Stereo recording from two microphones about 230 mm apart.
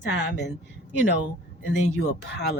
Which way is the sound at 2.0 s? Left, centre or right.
Left.